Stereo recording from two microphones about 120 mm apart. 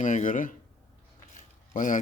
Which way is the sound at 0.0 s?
90° left.